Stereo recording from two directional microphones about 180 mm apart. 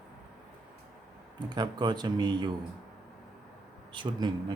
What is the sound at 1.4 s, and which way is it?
Speech, 25° right (ahead or behind).